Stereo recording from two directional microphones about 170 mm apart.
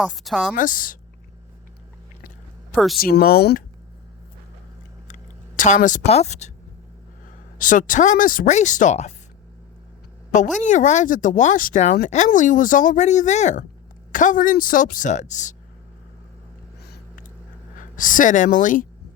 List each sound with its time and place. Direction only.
0.0 s a woman's voice: centre (ahead or behind)
0.5 s speech: 50° left (ahead or behind)
2.7 s a woman's voice: centre (ahead or behind)
3.0 s speech: 60° left (ahead or behind)
5.0 s speech: 45° left (ahead or behind)
7.6 s speech: 50° left (ahead or behind)
10.6 s speech: 45° left (ahead or behind)
16.8 s a sound: 70° left (ahead or behind)
17.7 s speech: 50° left (ahead or behind)